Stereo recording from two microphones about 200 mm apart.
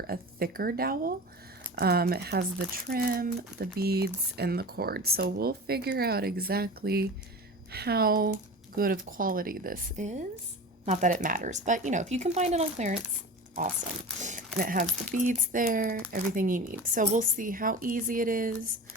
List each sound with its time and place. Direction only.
0.1 s speech: 50° right (ahead or behind); by 13.0 s 35° right (ahead or behind)
14.2 s speech: 40° right (ahead or behind)